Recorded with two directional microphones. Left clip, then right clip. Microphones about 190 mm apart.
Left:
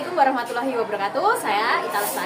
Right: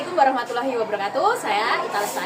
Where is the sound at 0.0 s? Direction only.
Centre (ahead or behind).